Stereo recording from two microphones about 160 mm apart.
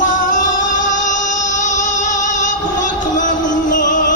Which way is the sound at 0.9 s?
50° left (ahead or behind).